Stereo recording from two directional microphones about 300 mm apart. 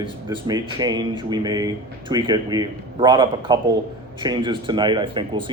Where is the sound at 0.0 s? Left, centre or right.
Centre.